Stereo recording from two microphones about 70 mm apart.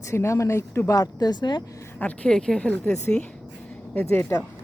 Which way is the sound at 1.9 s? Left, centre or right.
Left.